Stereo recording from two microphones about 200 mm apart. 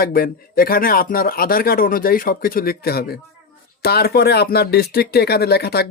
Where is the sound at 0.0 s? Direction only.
45° left (ahead or behind).